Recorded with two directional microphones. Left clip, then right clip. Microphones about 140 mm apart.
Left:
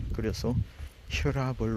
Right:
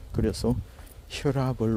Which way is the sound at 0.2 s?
40° right (ahead or behind).